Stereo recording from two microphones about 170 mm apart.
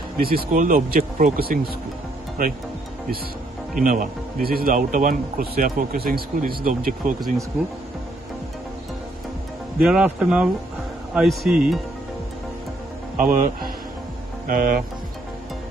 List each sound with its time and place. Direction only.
0.2 s speech: 60° right (ahead or behind)
3.7 s a man's voice: 50° right (ahead or behind)
9.8 s a man's voice: 5° right (ahead or behind)
13.2 s speech: 50° right (ahead or behind)